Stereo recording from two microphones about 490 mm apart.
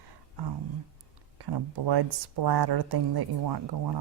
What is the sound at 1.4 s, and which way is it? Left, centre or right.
Speech, right.